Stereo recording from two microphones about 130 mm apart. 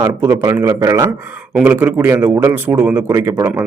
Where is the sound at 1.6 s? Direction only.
15° right (ahead or behind).